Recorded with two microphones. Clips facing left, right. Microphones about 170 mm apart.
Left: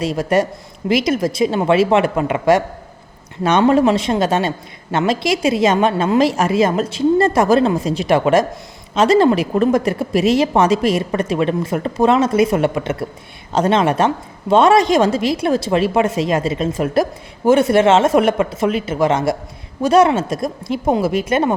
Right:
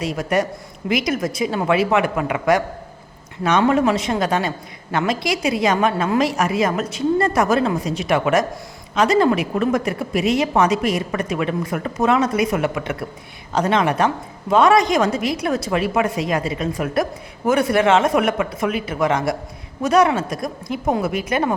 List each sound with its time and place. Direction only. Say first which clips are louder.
0.0 s a woman's voice: left 4 dB; 30° left (ahead or behind)